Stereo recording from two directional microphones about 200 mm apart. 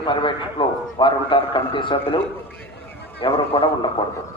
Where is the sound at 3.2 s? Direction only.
25° left (ahead or behind).